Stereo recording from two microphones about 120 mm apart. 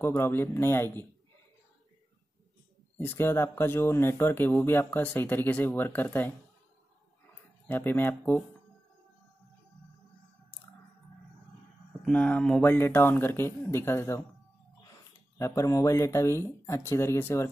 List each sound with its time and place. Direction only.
0.0 s speech: 20° left (ahead or behind)
3.0 s speech: 20° left (ahead or behind)
7.6 s speech: 15° left (ahead or behind)
12.0 s speech: 10° left (ahead or behind)
15.3 s speech: 25° left (ahead or behind)